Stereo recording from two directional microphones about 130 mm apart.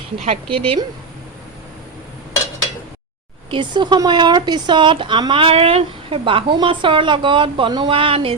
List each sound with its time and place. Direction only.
0.3 s speech: 40° right (ahead or behind)
3.5 s speech: 35° right (ahead or behind)